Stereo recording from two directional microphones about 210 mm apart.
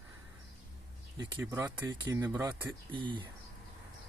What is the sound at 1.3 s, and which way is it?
Speech, 10° right (ahead or behind).